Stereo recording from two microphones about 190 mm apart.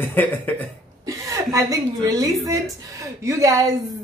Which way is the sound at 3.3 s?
15° right (ahead or behind).